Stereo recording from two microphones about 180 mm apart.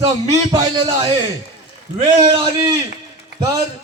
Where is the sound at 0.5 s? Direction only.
20° right (ahead or behind).